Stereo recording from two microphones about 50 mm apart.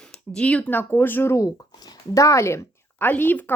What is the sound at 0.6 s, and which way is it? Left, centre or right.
Speech, left.